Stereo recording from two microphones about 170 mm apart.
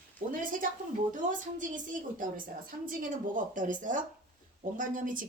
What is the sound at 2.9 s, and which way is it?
Speech, 50° right (ahead or behind).